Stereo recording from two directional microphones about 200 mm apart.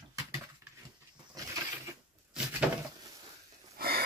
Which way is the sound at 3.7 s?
50° right (ahead or behind).